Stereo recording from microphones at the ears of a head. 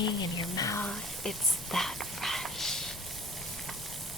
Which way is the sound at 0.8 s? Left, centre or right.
Centre.